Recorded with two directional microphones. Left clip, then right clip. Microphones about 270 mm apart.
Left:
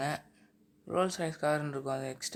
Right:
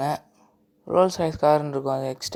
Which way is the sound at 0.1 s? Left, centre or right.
Centre.